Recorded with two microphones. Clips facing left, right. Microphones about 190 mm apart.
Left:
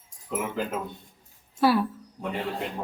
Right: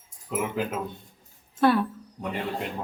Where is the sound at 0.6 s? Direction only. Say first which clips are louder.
Right 1 dB; 5° right (ahead or behind).